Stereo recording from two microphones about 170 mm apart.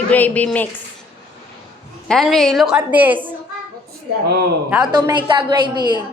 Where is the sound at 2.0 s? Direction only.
Centre (ahead or behind).